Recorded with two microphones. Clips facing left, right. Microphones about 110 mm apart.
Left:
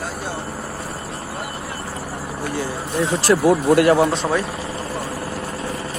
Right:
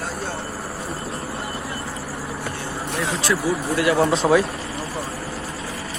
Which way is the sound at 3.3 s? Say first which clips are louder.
Left 9 dB; 55° left (ahead or behind).